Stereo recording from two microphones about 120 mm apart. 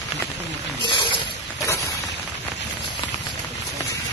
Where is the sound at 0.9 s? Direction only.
45° left (ahead or behind).